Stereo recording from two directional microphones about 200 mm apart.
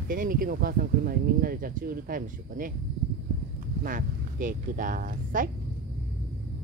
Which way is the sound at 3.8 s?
40° right (ahead or behind).